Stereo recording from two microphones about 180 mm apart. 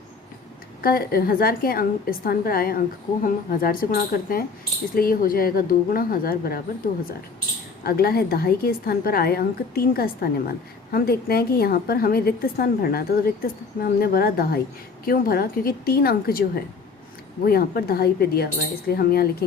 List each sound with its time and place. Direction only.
0.8 s a woman's voice: 55° left (ahead or behind)
17.4 s a woman's voice: 60° left (ahead or behind)